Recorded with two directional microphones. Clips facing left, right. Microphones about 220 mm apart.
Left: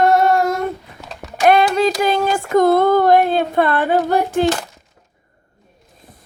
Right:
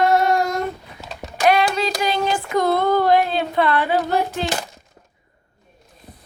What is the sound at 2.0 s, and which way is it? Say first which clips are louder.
Speech: left 4 dB; 50° left (ahead or behind).